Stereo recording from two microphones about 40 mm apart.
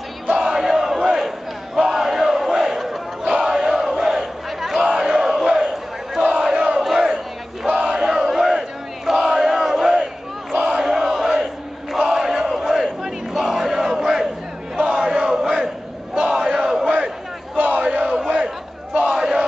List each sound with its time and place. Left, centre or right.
0.3 s battle cry: centre
3.3 s crowd: centre
3.9 s battle cry: centre
5.0 s crowd: centre
6.8 s battle cry: centre
10.5 s battle cry: right
10.8 s battle cry: centre
11.9 s crowd: centre
16.2 s battle cry: centre
17.7 s crowd: right